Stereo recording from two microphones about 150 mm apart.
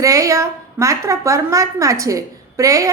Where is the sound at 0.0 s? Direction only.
20° right (ahead or behind).